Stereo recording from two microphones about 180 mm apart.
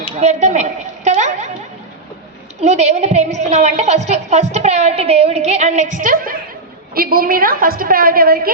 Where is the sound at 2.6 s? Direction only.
40° right (ahead or behind).